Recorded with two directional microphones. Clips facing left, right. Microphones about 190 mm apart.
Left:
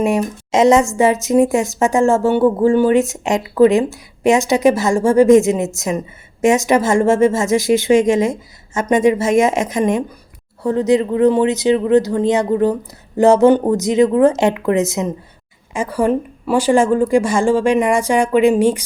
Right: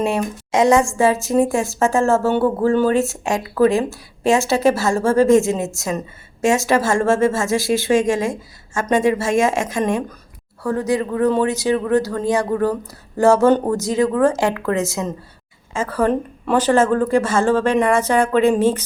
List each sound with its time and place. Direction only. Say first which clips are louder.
0.0 s a woman's voice: left 3 dB; 20° left (ahead or behind)